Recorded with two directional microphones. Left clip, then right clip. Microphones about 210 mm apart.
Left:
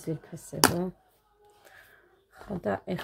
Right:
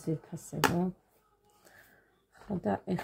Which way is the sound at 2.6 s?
10° left (ahead or behind).